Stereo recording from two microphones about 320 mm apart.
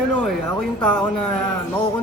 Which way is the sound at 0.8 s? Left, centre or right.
Centre.